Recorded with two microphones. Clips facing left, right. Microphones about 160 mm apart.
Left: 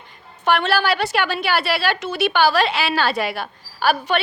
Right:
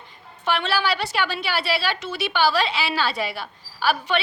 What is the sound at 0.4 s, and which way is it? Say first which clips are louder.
A woman's voice: left 5 dB; 50° left (ahead or behind).